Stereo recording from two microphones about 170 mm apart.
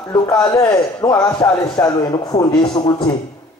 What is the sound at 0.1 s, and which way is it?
A man's voice, 25° left (ahead or behind).